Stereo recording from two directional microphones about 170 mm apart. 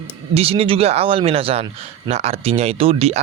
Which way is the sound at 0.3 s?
35° right (ahead or behind).